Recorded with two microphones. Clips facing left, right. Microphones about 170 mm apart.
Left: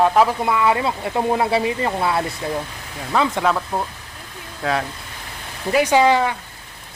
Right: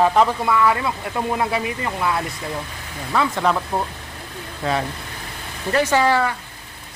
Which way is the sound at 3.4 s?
5° right (ahead or behind).